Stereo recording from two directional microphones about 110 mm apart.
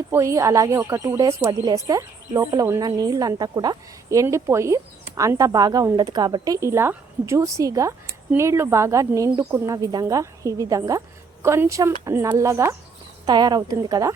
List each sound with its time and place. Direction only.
0.1 s a woman's voice: 25° right (ahead or behind)
13.2 s a woman's voice: 40° right (ahead or behind)